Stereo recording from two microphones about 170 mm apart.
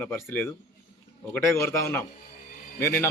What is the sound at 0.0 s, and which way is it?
A man's voice, 10° left (ahead or behind).